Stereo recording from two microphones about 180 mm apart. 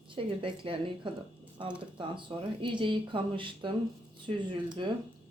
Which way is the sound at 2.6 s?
30° right (ahead or behind).